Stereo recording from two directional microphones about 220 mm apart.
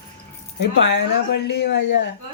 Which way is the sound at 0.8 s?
50° left (ahead or behind).